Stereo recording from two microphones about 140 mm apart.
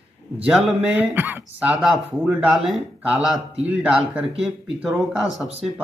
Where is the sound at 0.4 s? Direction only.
Centre (ahead or behind).